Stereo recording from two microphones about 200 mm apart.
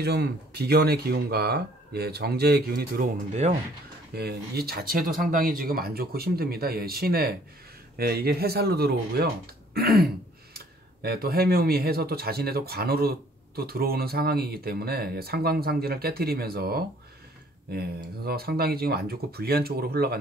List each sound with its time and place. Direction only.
0.0 s speech: 55° right (ahead or behind)
3.4 s speech: 35° right (ahead or behind)
4.1 s speech: 50° right (ahead or behind)